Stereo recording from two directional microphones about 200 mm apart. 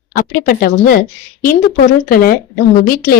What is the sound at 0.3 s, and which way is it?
Speech, 45° left (ahead or behind).